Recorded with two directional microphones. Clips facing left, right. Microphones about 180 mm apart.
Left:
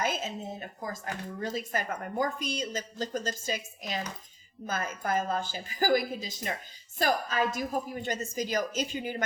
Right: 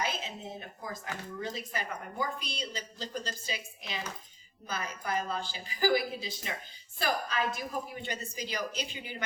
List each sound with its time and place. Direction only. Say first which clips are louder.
0.0 s a woman's voice: left 4 dB; 45° left (ahead or behind)